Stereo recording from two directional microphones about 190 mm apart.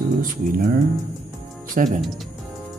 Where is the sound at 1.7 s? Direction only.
40° right (ahead or behind).